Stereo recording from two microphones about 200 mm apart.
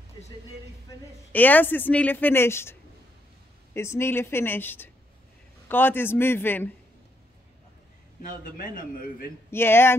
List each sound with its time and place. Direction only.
0.8 s speech: 10° left (ahead or behind)
8.3 s a man's voice: 40° left (ahead or behind)
9.5 s speech: 10° left (ahead or behind)